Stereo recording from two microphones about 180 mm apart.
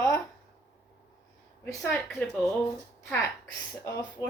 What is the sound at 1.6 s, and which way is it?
Speech, 10° left (ahead or behind).